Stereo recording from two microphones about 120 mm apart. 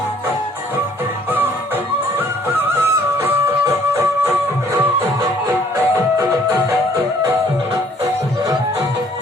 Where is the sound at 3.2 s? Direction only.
20° right (ahead or behind).